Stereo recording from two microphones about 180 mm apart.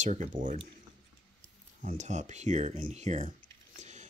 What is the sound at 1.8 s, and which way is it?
Speech, 45° right (ahead or behind).